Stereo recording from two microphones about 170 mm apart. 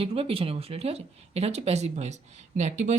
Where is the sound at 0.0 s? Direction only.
35° right (ahead or behind).